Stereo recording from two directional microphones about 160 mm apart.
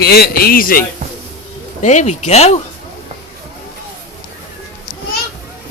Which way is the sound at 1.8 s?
45° left (ahead or behind).